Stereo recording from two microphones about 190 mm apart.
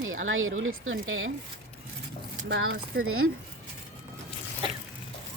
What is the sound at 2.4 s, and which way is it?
Speech, 90° right.